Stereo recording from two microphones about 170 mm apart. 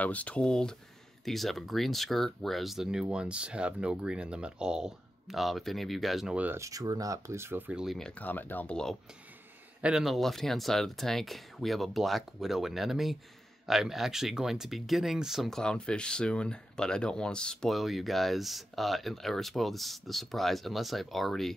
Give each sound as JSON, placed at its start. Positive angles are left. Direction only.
{"t": 0.0, "sound": "speech", "side_deg": 10}
{"t": 9.8, "sound": "speech", "side_deg": -5}